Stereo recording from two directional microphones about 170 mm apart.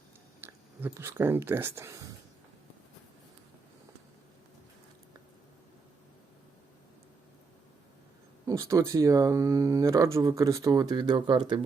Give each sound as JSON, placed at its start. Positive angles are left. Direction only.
{"t": 0.4, "sound": "speech", "side_deg": -10}
{"t": 8.4, "sound": "speech", "side_deg": -20}